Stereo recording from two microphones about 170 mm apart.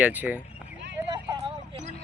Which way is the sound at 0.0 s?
10° right (ahead or behind).